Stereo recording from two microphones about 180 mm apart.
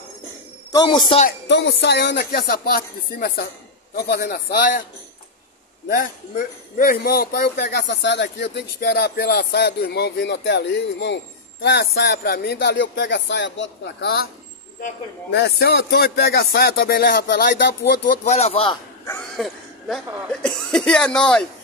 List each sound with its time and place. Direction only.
0.7 s speech: 25° left (ahead or behind)
1.5 s speech: 75° left (ahead or behind); by 4.8 s 55° left (ahead or behind)
6.3 s speech: 50° left (ahead or behind); by 11.1 s 75° left (ahead or behind)
11.6 s speech: 65° left (ahead or behind)
15.3 s speech: 65° left (ahead or behind)
18.2 s speech: 40° left (ahead or behind)
19.3 s a sound: centre (ahead or behind)
20.4 s speech: 5° left (ahead or behind)